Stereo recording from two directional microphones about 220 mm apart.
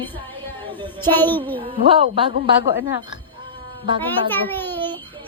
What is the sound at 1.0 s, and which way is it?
Music, 10° left (ahead or behind).